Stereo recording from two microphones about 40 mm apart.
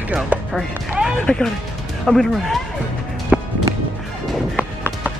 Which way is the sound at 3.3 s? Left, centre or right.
Right.